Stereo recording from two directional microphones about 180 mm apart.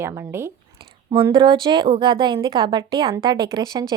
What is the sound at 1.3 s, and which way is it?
A woman's voice, 25° right (ahead or behind).